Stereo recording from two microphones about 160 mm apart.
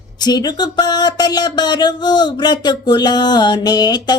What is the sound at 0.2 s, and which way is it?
Speech, 25° left (ahead or behind).